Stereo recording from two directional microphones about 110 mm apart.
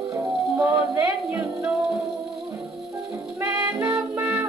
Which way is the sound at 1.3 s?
5° right (ahead or behind).